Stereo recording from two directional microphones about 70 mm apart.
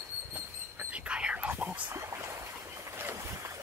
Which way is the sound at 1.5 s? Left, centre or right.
Right.